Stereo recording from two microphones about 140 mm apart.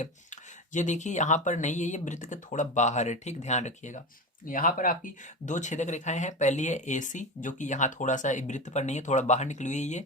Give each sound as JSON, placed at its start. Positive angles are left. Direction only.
{"t": 0.0, "sound": "speech", "side_deg": 60}
{"t": 4.4, "sound": "speech", "side_deg": 80}